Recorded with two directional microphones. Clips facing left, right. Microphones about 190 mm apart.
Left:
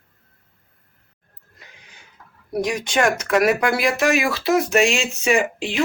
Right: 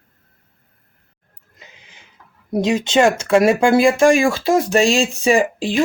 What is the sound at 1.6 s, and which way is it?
Neigh, 20° right (ahead or behind).